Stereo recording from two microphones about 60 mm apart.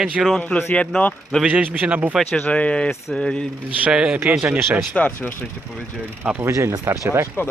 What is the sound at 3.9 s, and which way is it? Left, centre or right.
Speech, centre.